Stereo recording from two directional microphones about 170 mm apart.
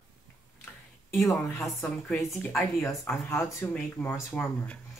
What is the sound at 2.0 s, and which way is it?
Speech, centre (ahead or behind).